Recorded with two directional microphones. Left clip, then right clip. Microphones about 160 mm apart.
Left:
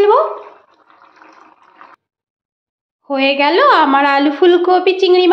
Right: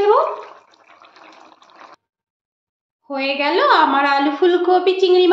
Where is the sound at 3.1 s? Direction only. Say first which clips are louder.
Left 6 dB; 45° left (ahead or behind).